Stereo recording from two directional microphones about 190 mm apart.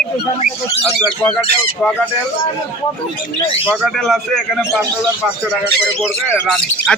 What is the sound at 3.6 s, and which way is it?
A man's voice, 10° right (ahead or behind).